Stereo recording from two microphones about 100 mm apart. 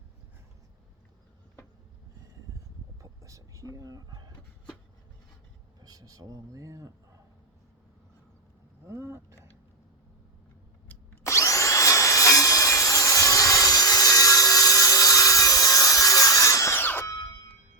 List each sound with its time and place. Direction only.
3.0 s vehicle: 30° right (ahead or behind)
5.8 s speech: 40° right (ahead or behind)
8.9 s speech: 25° right (ahead or behind)
10.8 s drill: 30° left (ahead or behind)
17.1 s music: 45° left (ahead or behind)